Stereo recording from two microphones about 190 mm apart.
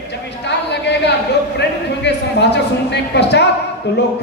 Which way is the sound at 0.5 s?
65° left (ahead or behind).